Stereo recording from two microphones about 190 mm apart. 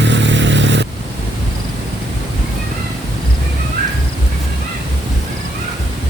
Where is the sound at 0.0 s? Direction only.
70° right (ahead or behind).